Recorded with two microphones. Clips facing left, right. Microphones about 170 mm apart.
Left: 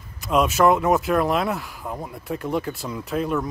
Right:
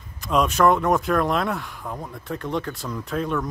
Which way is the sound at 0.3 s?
5° left (ahead or behind).